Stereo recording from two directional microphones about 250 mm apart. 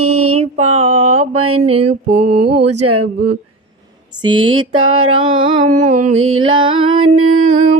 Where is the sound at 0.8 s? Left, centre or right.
Right.